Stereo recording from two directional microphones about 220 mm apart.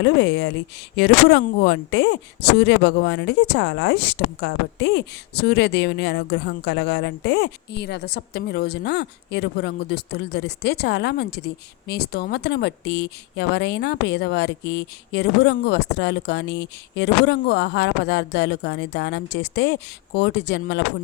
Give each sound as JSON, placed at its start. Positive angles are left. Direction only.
{"t": 0.0, "sound": "speech", "side_deg": 50}